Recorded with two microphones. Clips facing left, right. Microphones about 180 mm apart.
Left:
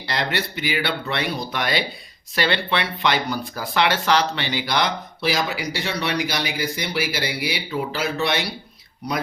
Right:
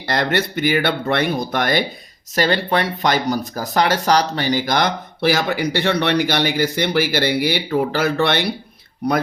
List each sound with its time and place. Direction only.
0.1 s speech: 50° right (ahead or behind)